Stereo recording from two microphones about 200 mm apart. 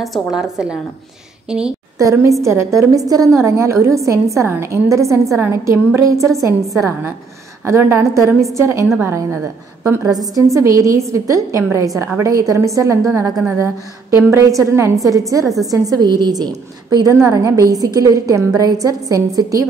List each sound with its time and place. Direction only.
0.0 s a woman's voice: centre (ahead or behind)
2.0 s a woman's voice: 15° right (ahead or behind)
15.4 s a woman's voice: centre (ahead or behind)
15.7 s a woman's voice: 20° right (ahead or behind)